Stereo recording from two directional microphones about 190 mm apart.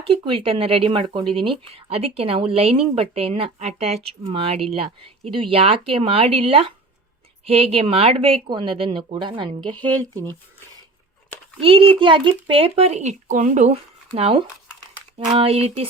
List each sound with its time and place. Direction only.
0.1 s speech: 30° right (ahead or behind)
11.6 s speech: 30° right (ahead or behind)